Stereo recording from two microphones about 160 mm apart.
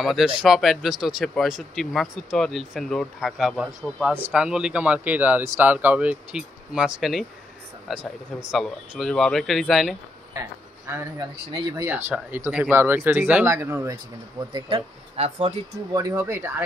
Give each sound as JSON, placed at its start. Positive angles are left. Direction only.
{"t": 0.0, "sound": "speech", "side_deg": 0}
{"t": 11.4, "sound": "speech", "side_deg": -30}
{"t": 12.1, "sound": "speech", "side_deg": -5}
{"t": 14.5, "sound": "speech", "side_deg": -35}
{"t": 15.9, "sound": "speech", "side_deg": -20}